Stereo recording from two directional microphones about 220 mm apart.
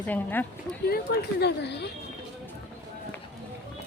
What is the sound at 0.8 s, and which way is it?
Speech, 45° left (ahead or behind).